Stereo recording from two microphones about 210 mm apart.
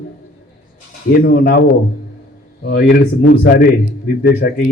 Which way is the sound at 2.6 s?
50° left (ahead or behind).